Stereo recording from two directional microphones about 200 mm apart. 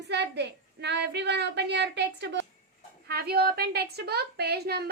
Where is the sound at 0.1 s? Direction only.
60° right (ahead or behind).